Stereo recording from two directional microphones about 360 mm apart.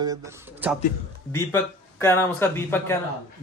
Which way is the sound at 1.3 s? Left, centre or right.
Centre.